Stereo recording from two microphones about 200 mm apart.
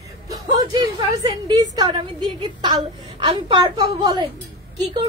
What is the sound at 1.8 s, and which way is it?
A woman's voice, 20° right (ahead or behind).